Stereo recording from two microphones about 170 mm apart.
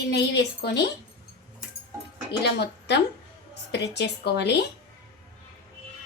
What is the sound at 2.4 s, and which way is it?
A woman's voice, 75° left (ahead or behind).